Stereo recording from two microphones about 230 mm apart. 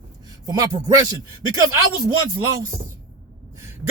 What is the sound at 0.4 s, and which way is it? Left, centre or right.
Speech, centre.